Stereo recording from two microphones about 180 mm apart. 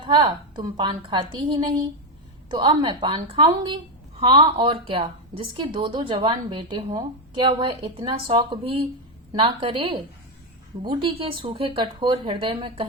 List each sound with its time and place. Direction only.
0.0 s a woman's voice: 25° right (ahead or behind)